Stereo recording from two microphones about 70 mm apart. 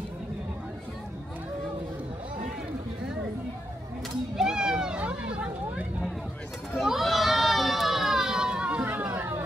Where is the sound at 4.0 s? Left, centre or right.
Centre.